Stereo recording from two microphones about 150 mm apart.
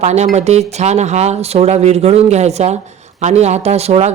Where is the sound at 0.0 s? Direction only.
50° right (ahead or behind).